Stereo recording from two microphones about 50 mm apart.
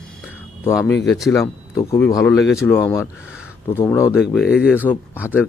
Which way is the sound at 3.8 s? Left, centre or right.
Left.